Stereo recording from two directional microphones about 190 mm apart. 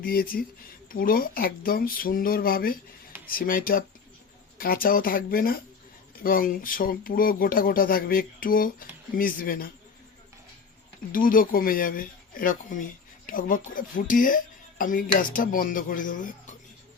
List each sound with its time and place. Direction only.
0.0 s speech: 50° left (ahead or behind)
11.1 s speech: 45° left (ahead or behind)